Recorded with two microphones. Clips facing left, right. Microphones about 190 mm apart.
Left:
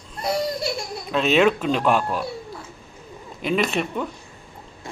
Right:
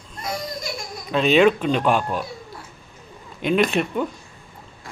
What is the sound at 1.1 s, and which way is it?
Speech, centre (ahead or behind).